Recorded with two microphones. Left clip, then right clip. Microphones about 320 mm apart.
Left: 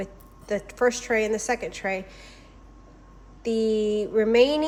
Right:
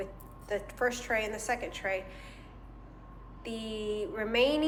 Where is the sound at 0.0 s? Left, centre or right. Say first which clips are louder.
Left 4 dB; centre.